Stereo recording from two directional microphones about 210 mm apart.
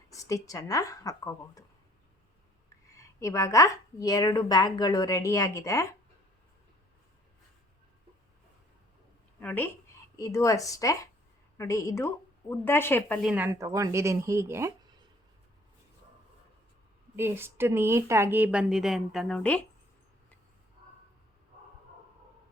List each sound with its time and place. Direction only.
0.1 s a woman's voice: 15° left (ahead or behind)
2.9 s a woman's voice: 15° left (ahead or behind)
9.4 s a woman's voice: 5° left (ahead or behind)
13.3 s speech: 10° right (ahead or behind)
17.2 s speech: 10° right (ahead or behind); by 19.6 s 5° left (ahead or behind)